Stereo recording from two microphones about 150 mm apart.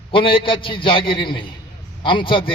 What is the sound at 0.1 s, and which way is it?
Speech, 35° left (ahead or behind).